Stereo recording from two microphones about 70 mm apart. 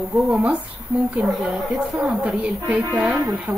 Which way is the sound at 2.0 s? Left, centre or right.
Centre.